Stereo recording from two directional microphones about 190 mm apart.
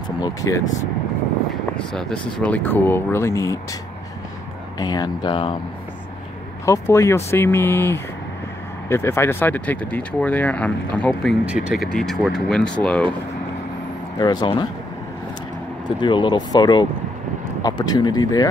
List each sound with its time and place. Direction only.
0.2 s speech: 15° left (ahead or behind)
1.9 s speech: 5° left (ahead or behind)
4.7 s speech: 20° left (ahead or behind)
6.6 s speech: 15° left (ahead or behind)
14.2 s speech: 20° left (ahead or behind)
16.0 s speech: 25° left (ahead or behind)